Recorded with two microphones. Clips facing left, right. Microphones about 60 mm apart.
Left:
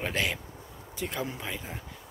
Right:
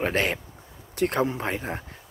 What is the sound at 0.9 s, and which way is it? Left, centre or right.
Speech, right.